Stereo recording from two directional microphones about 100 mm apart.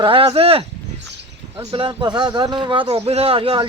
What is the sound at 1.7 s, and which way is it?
A man's voice, 55° right (ahead or behind).